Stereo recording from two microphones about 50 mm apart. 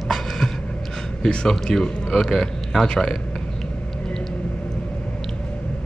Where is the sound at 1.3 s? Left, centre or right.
Centre.